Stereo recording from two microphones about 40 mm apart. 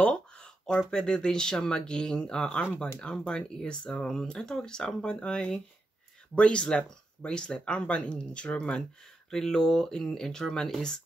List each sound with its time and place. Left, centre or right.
0.0 s speech: left
4.0 s speech: centre